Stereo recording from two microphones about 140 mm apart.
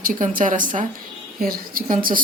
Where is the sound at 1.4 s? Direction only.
90° right; by 2.2 s 75° right (ahead or behind).